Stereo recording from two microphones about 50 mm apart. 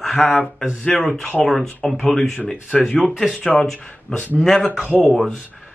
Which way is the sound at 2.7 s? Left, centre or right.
Left.